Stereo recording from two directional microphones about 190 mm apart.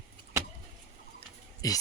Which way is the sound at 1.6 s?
20° left (ahead or behind).